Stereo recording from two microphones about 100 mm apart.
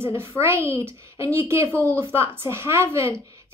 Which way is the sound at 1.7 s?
20° left (ahead or behind).